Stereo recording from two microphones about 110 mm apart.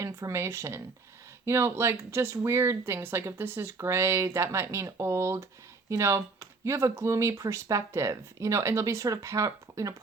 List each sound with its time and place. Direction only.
0.0 s speech: 25° right (ahead or behind)